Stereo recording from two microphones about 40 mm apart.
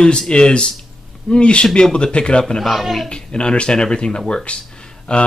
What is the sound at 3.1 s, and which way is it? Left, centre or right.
Speech, left.